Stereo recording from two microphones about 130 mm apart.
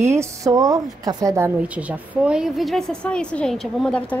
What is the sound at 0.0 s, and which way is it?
A woman's voice, 20° right (ahead or behind).